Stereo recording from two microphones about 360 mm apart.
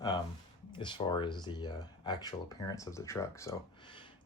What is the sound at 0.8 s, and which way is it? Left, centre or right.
Speech, centre.